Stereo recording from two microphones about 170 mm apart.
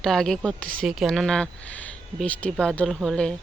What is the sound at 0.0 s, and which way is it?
Speech, centre (ahead or behind).